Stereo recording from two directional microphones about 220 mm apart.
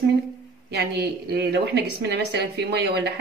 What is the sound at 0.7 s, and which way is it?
Speech, 45° right (ahead or behind).